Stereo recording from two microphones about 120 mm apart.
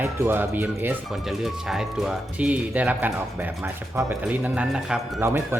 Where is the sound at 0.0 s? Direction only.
20° right (ahead or behind).